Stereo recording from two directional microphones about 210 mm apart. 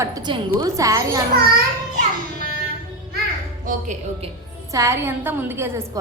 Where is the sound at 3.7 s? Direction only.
35° right (ahead or behind).